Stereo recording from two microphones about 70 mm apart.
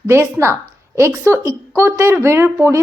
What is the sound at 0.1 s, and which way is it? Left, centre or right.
Speech, right.